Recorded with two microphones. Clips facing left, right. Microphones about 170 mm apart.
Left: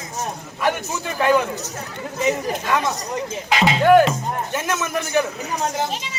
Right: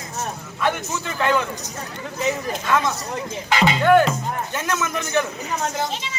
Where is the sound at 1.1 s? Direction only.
10° left (ahead or behind).